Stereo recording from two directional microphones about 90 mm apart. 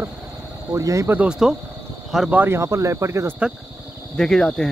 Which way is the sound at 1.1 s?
15° right (ahead or behind).